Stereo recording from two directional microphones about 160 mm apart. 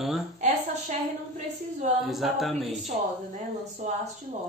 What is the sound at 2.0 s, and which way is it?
Speech, centre (ahead or behind).